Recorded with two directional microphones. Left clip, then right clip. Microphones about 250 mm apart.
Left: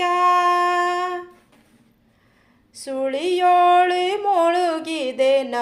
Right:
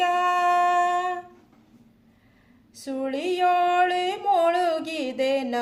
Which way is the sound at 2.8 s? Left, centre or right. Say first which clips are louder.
Left 5 dB; centre.